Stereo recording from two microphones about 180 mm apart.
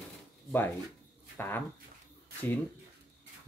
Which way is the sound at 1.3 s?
10° left (ahead or behind).